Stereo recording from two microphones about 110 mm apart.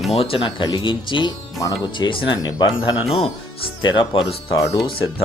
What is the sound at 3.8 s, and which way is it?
Speech, 50° left (ahead or behind).